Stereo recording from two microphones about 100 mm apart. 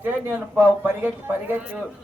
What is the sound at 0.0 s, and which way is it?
A man's voice, 15° right (ahead or behind).